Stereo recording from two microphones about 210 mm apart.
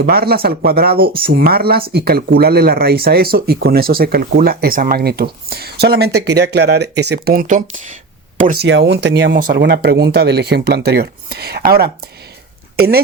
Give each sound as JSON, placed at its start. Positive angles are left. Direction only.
{"t": 0.0, "sound": "speech", "side_deg": -45}
{"t": 8.6, "sound": "speech", "side_deg": -55}